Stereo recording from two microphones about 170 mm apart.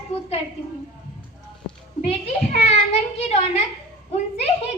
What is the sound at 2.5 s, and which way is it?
Child singing, 40° left (ahead or behind).